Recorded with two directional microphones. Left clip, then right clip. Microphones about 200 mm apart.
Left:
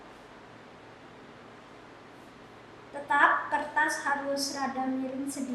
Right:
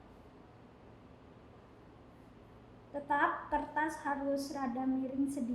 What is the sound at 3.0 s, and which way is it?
A woman's voice, 15° left (ahead or behind).